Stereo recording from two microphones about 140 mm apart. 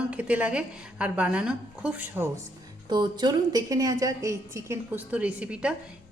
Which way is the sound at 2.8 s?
30° right (ahead or behind).